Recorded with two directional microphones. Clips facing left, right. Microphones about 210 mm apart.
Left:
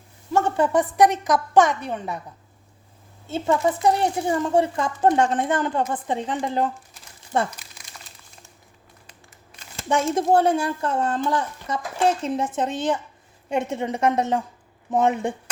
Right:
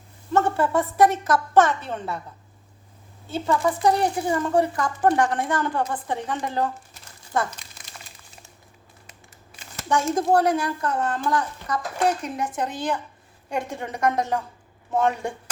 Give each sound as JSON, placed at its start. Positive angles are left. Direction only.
{"t": 0.3, "sound": "a woman's voice", "side_deg": 15}
{"t": 3.2, "sound": "a woman's voice", "side_deg": 20}
{"t": 9.7, "sound": "a woman's voice", "side_deg": 25}